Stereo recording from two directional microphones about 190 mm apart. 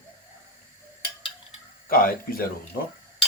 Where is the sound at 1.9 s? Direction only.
50° left (ahead or behind).